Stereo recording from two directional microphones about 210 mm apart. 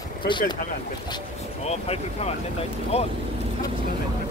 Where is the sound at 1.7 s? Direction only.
30° left (ahead or behind).